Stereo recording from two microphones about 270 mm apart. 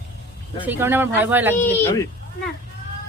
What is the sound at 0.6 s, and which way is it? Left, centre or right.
Speech, centre.